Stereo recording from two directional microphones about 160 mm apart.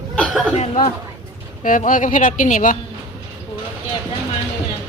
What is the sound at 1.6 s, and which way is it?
A woman's voice, 55° left (ahead or behind).